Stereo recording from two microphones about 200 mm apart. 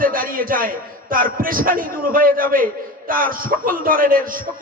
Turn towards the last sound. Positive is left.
turn(degrees=-45)  # may be behind; listen again after turning